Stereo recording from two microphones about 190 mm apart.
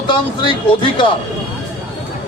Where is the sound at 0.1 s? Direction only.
25° left (ahead or behind).